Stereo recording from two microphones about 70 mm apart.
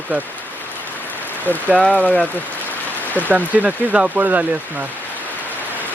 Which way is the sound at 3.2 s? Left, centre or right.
Right.